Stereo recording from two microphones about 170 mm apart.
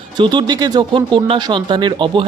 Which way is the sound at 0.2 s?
30° right (ahead or behind).